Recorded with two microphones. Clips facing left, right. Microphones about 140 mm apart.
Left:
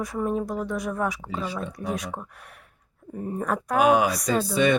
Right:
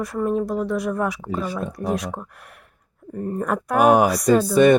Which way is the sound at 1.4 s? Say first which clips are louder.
Right 3 dB; 45° right (ahead or behind).